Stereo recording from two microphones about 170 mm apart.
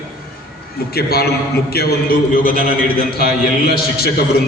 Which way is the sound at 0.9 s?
65° left (ahead or behind).